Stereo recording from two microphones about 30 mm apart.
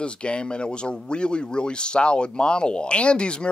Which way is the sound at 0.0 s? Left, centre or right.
Left.